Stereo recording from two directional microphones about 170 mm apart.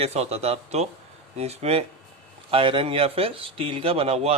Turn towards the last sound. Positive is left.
turn(degrees=-35)  # may be behind; listen again after turning